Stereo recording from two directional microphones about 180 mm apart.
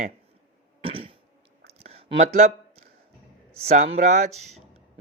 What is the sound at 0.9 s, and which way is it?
Cough, 30° right (ahead or behind).